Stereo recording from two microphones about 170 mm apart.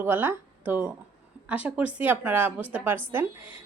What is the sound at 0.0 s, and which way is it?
A woman's voice, 10° right (ahead or behind).